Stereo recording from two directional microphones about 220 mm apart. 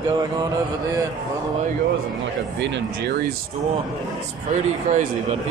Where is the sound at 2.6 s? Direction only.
55° right (ahead or behind).